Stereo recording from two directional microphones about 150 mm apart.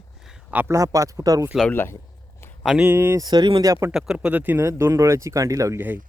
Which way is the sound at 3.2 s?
30° right (ahead or behind).